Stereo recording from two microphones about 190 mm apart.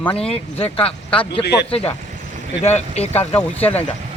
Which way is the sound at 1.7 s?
30° left (ahead or behind).